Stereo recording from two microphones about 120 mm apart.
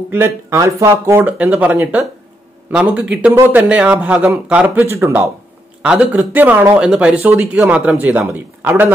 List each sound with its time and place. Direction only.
0.1 s speech: 25° right (ahead or behind)
1.4 s speech: 10° right (ahead or behind)
5.8 s speech: 10° right (ahead or behind)